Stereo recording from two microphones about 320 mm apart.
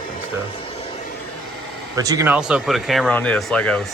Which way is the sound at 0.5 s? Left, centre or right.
Centre.